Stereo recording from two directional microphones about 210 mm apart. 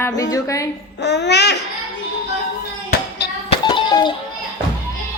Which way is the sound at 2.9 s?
50° left (ahead or behind).